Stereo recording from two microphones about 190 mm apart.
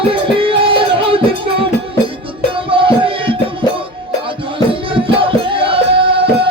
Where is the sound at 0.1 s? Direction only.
30° right (ahead or behind).